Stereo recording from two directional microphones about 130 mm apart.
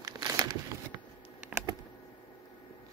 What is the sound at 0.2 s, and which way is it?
Crumpling, 35° right (ahead or behind).